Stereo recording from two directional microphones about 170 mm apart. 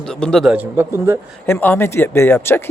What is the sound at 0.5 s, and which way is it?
Speech, 10° right (ahead or behind).